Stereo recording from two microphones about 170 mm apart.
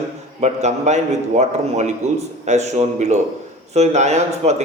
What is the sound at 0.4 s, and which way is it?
A man's voice, 40° right (ahead or behind).